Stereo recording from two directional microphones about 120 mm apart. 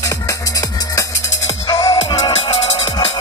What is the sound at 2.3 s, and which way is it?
Music, 55° left (ahead or behind).